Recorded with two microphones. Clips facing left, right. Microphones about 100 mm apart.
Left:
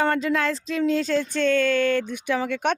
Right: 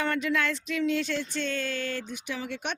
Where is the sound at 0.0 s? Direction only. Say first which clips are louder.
Left 5 dB; 35° left (ahead or behind).